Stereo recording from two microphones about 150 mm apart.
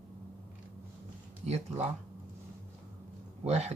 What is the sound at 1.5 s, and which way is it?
Speech, 45° right (ahead or behind).